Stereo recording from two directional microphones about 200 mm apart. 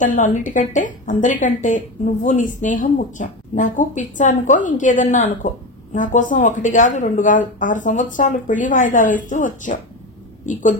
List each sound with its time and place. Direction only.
0.0 s a woman's voice: 40° left (ahead or behind)